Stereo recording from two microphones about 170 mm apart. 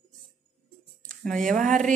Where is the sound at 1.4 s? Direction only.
50° right (ahead or behind).